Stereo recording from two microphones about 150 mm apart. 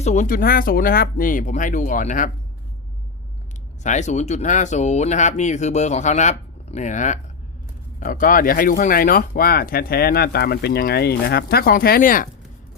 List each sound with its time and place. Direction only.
0.0 s speech: 55° left (ahead or behind)
3.8 s speech: 50° left (ahead or behind)